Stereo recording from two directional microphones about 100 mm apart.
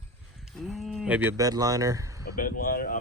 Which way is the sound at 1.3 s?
40° right (ahead or behind).